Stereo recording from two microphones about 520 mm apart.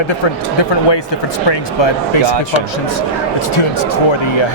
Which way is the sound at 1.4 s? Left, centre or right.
Left.